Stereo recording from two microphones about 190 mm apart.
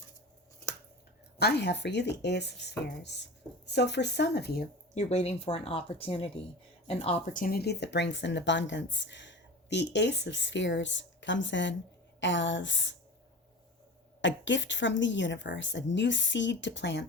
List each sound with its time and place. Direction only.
1.4 s speech: 60° left (ahead or behind)
4.9 s speech: 35° left (ahead or behind)
7.4 s speech: 55° left (ahead or behind); by 13.0 s 75° left (ahead or behind)
14.2 s speech: 70° left (ahead or behind)